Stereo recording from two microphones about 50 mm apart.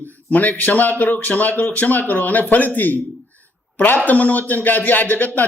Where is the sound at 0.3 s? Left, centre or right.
Left.